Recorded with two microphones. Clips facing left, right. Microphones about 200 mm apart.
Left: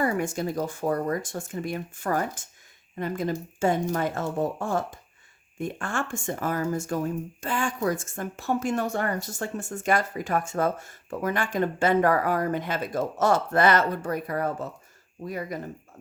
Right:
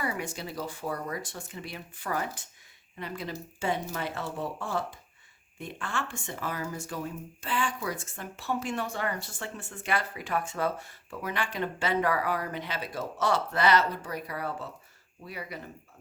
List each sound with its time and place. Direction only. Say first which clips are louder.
0.0 s speech: left 8 dB; 50° left (ahead or behind)